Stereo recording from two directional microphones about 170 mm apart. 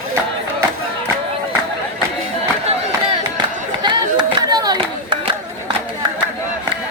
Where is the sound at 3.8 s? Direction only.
25° right (ahead or behind).